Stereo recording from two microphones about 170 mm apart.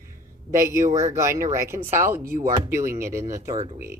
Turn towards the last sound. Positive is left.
turn(degrees=-20)  # may be behind; listen again after turning